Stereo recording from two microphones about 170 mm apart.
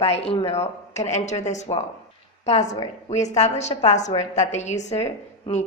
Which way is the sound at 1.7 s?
30° left (ahead or behind).